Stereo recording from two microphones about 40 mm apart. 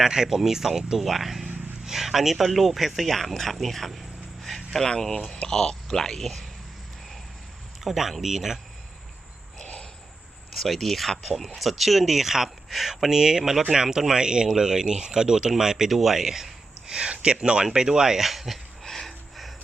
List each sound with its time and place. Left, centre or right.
0.0 s speech: centre
7.9 s speech: centre
9.6 s cricket: left
10.5 s speech: centre
16.8 s speech: right
18.3 s a sound: centre